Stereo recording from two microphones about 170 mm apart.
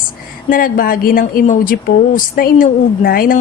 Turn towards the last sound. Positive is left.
turn(degrees=55)  # may be behind; listen again after turning